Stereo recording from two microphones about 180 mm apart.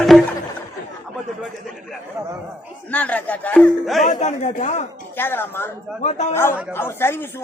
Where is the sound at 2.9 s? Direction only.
10° left (ahead or behind).